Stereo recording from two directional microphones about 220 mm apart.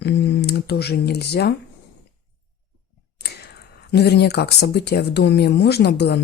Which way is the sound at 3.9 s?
50° left (ahead or behind).